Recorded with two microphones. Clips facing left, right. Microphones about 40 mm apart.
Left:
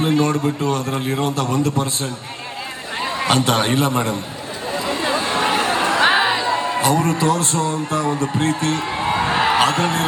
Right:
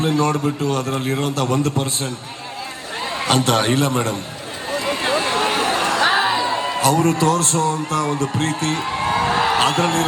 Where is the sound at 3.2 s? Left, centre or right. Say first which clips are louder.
Even; left.